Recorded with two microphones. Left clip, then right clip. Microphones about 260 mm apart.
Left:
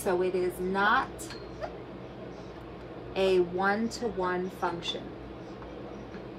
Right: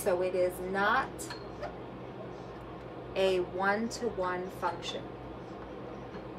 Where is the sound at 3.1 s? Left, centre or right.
Centre.